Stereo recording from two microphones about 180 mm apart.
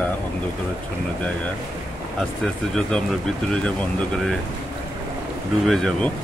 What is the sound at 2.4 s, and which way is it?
Speech, 5° left (ahead or behind).